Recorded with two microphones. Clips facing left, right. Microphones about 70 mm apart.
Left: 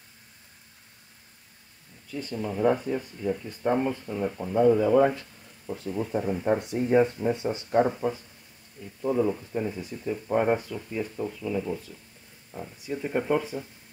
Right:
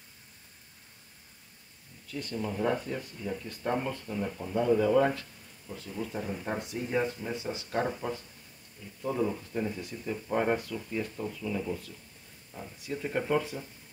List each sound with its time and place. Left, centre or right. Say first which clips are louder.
2.0 s speech: left 3 dB; centre
5.7 s speech: left 7 dB; left
8.0 s speech: left 6 dB; centre